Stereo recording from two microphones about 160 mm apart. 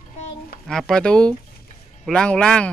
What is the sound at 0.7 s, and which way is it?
Speech, 5° left (ahead or behind).